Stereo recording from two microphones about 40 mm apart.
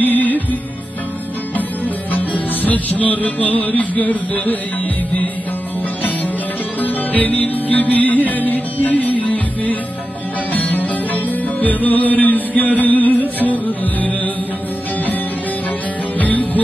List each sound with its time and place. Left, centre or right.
0.0 s music: left
2.1 s music: left
6.8 s music: left
16.2 s music: left